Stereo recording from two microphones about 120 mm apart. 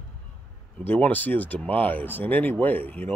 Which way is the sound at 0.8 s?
15° left (ahead or behind).